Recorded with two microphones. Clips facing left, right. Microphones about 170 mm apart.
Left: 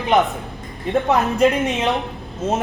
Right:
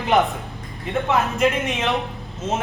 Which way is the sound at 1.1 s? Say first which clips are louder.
Left 3 dB; 35° left (ahead or behind).